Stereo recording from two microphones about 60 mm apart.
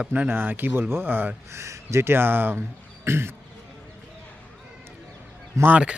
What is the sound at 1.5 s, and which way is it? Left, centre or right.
Speech, right.